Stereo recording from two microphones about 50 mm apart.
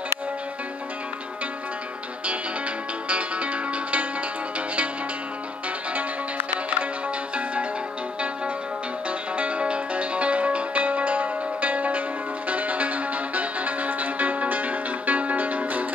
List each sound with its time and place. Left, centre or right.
3.1 s music: right
5.9 s music: right
9.4 s music: right